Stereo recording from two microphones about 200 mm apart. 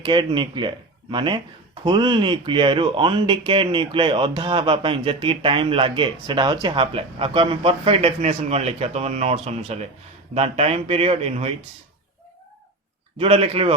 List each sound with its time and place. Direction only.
0.0 s speech: 25° right (ahead or behind)
13.1 s speech: 30° right (ahead or behind)